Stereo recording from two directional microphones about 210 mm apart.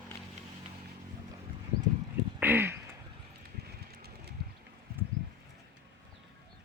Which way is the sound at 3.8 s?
50° right (ahead or behind).